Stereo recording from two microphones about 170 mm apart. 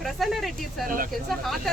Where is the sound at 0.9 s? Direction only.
55° right (ahead or behind).